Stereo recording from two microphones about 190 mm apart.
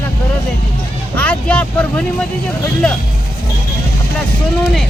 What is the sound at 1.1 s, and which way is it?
Speech, 5° left (ahead or behind).